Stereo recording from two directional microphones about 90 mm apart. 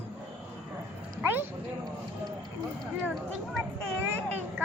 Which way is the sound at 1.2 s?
20° right (ahead or behind).